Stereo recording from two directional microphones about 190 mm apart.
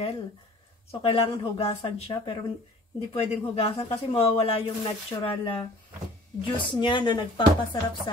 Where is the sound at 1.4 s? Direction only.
30° left (ahead or behind).